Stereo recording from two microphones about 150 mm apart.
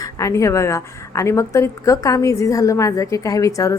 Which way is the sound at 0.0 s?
20° left (ahead or behind).